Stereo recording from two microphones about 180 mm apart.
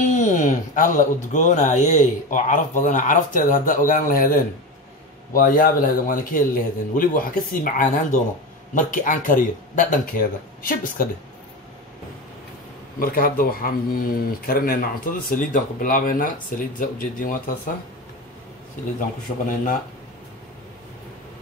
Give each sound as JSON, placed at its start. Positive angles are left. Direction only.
{"t": 0.2, "sound": "speech", "side_deg": 45}
{"t": 13.0, "sound": "speech", "side_deg": 55}
{"t": 18.9, "sound": "speech", "side_deg": 50}